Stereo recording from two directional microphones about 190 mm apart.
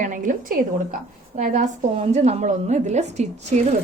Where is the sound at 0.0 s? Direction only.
45° right (ahead or behind).